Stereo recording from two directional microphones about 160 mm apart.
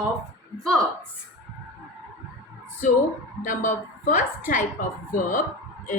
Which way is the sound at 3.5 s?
55° left (ahead or behind).